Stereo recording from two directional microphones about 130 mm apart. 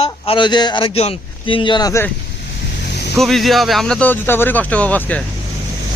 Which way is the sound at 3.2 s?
Centre (ahead or behind).